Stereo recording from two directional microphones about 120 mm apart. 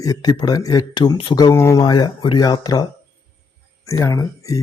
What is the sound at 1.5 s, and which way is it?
A man's voice, 25° left (ahead or behind).